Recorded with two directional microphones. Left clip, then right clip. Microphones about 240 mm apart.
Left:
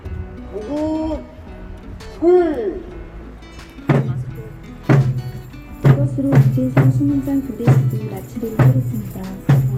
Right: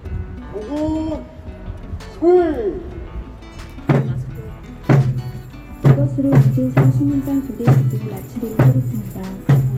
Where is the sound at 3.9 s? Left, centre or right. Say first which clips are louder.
Even; centre.